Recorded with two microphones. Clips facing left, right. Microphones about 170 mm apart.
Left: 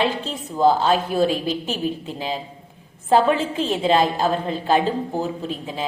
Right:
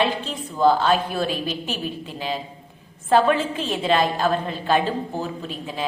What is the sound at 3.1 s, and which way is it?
A woman's voice, 25° left (ahead or behind).